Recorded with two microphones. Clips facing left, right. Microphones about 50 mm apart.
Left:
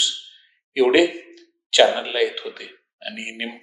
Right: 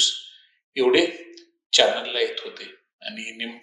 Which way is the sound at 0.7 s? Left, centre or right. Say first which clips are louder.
Left 3 dB; centre.